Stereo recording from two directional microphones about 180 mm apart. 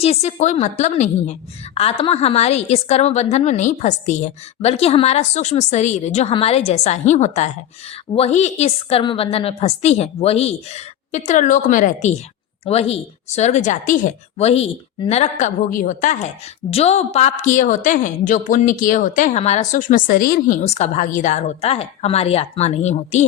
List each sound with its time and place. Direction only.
0.0 s a woman's voice: 35° left (ahead or behind)
12.6 s a woman's voice: 35° left (ahead or behind)